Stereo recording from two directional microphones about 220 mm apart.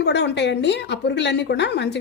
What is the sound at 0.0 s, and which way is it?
Speech, 50° left (ahead or behind).